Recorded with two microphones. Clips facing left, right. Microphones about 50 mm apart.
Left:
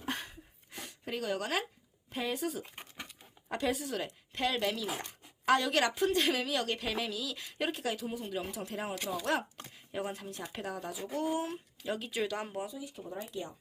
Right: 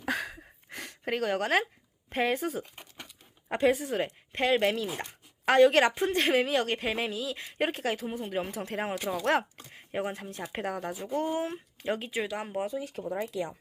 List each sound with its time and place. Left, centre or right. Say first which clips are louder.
0.7 s a sound: right 7 dB; right
2.0 s a woman's voice: right 6 dB; right
12.1 s speech: right 2 dB; centre
12.5 s a woman's voice: right 7 dB; right
12.8 s speech: right 8 dB; right